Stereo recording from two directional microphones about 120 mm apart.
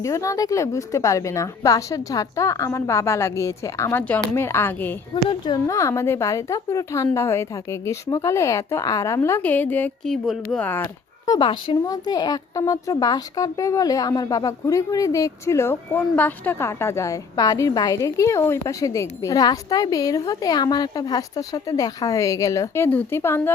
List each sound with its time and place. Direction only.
0.0 s a woman's voice: 25° left (ahead or behind)
5.1 s a woman's voice: 40° left (ahead or behind)
5.6 s a woman's voice: 25° left (ahead or behind)
10.0 s speech: centre (ahead or behind)
10.6 s speech: 15° left (ahead or behind)
11.3 s speech: 40° left (ahead or behind)
11.9 s a woman's voice: 35° left (ahead or behind)